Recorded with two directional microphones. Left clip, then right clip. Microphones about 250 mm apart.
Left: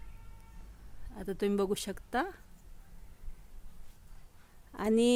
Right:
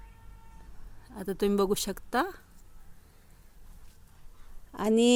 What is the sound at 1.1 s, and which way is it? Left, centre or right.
A woman's voice, centre.